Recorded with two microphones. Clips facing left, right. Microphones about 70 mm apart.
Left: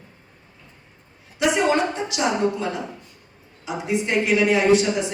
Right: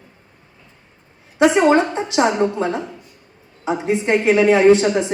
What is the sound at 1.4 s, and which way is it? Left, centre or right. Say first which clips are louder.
A woman's voice: right 6 dB; right.